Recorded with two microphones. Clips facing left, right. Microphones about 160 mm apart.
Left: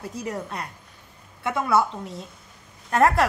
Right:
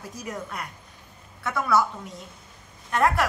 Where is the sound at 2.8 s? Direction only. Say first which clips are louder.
Left 3 dB; 40° left (ahead or behind).